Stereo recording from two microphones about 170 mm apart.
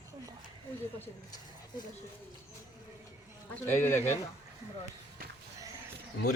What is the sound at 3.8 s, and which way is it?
Speech, 10° left (ahead or behind).